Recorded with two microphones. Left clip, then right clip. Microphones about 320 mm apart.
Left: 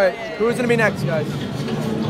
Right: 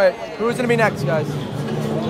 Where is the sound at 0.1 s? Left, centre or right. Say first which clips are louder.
Left 1 dB; left.